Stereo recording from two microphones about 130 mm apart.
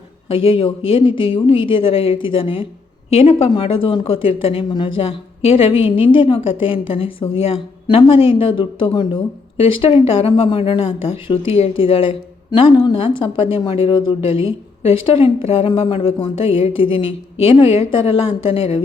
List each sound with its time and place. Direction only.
0.3 s speech: 45° left (ahead or behind)